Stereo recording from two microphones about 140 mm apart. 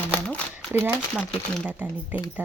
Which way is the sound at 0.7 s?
15° right (ahead or behind).